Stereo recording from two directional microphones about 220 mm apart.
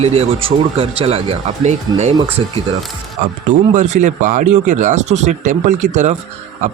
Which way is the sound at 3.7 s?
35° right (ahead or behind).